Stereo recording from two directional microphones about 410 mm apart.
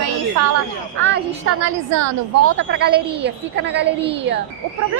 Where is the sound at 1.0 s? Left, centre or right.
Right.